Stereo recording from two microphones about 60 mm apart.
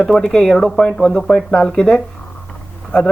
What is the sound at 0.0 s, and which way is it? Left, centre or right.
Speech, centre.